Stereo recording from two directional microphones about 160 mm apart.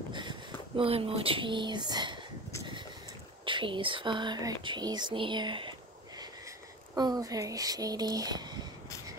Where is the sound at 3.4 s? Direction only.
30° right (ahead or behind).